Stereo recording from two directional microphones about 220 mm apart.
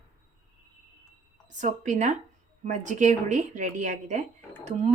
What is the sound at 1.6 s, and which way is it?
Speech, 35° right (ahead or behind).